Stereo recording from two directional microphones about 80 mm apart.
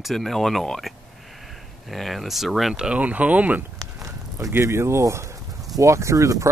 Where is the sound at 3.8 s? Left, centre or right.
Right.